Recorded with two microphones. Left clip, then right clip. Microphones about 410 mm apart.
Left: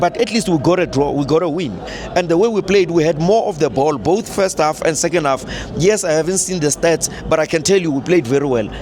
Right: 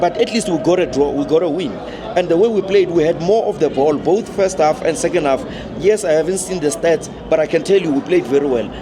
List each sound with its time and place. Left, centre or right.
0.0 s a man's voice: left
7.3 s a man's voice: left